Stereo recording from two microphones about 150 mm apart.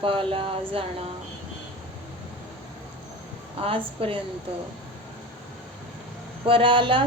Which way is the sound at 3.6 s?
40° right (ahead or behind).